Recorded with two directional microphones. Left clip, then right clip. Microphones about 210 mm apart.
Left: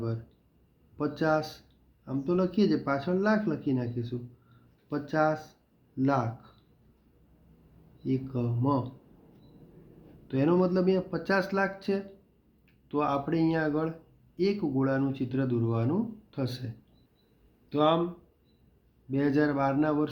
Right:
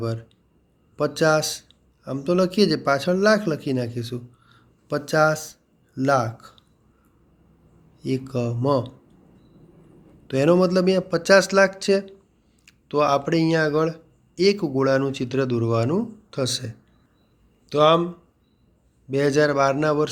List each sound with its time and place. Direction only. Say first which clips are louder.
0.9 s speech: right 8 dB; 40° right (ahead or behind)
8.0 s speech: right 7 dB; 40° right (ahead or behind)
10.2 s speech: right 8 dB; 40° right (ahead or behind)
19.1 s speech: right 8 dB; 40° right (ahead or behind)